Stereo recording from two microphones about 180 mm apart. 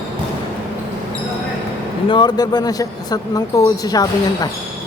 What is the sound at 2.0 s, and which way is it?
Speech, 25° left (ahead or behind).